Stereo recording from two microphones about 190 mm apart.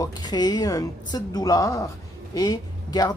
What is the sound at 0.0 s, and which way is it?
A man's voice, 20° left (ahead or behind).